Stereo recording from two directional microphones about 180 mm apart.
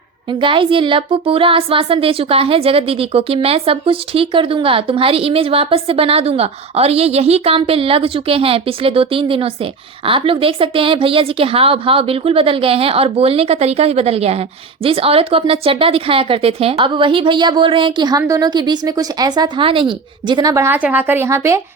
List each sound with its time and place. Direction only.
0.3 s speech: 30° right (ahead or behind)